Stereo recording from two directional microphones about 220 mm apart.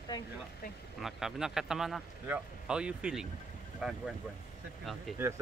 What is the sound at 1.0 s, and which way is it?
Speech, centre (ahead or behind).